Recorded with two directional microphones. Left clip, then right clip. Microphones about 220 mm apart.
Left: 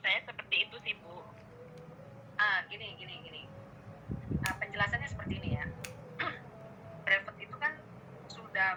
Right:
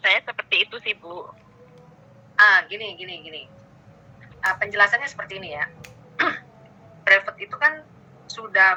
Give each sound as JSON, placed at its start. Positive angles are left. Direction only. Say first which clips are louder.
{"t": 0.0, "sound": "telephone", "louder": "right 12 dB", "side_deg": -45}
{"t": 2.3, "sound": "a woman's voice", "louder": "right 16 dB", "side_deg": -40}
{"t": 6.1, "sound": "a sound", "louder": "right 15 dB", "side_deg": -40}
{"t": 7.0, "sound": "a woman's voice", "louder": "right 13 dB", "side_deg": -40}